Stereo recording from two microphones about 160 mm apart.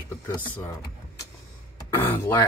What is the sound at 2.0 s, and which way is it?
Speech, 15° left (ahead or behind).